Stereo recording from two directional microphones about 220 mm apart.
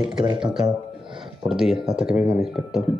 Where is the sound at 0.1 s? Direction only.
20° right (ahead or behind).